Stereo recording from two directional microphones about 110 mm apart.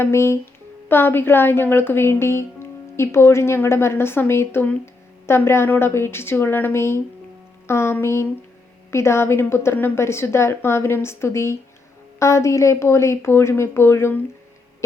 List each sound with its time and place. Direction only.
0.0 s speech: 25° left (ahead or behind)